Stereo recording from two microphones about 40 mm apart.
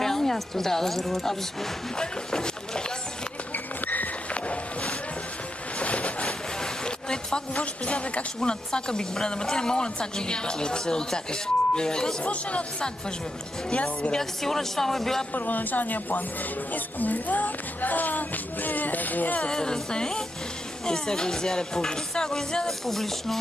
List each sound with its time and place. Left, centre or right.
0.0 s speech: centre
2.0 s a woman's voice: centre
3.5 s a sound: left
4.3 s music: left
5.8 s a sound: left
6.2 s a sound: centre
7.5 s a woman's voice: left
8.4 s a woman's voice: left
12.2 s a woman's voice: left
13.7 s a woman's voice: left
14.1 s speech: centre
15.3 s speech: left
19.5 s speech: centre